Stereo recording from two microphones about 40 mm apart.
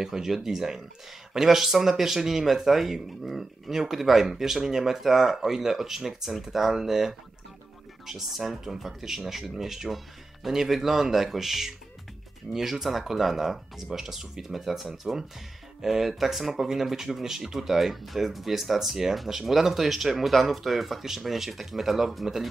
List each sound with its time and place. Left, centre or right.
0.0 s speech: centre
12.5 s speech: left
12.8 s speech: centre